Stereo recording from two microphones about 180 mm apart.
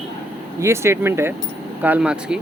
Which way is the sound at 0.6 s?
15° right (ahead or behind).